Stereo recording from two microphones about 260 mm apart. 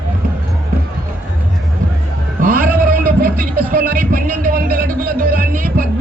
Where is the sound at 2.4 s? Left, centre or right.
Right.